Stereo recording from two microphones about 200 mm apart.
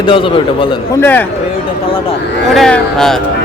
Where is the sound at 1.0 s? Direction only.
10° left (ahead or behind).